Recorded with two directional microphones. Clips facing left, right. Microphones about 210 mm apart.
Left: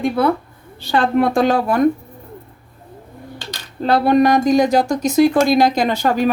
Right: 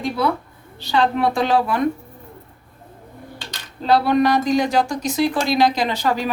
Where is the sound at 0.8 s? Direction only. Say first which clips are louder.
Left 3 dB; 50° left (ahead or behind).